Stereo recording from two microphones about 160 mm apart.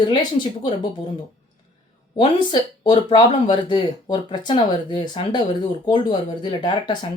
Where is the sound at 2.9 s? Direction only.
25° left (ahead or behind).